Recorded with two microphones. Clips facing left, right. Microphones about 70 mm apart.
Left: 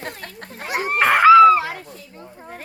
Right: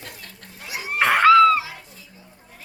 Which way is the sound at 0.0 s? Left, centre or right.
Left.